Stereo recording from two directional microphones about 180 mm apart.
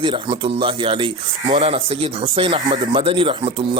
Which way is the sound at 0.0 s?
30° right (ahead or behind).